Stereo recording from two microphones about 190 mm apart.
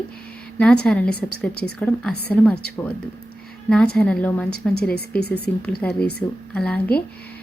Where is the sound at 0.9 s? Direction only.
5° left (ahead or behind).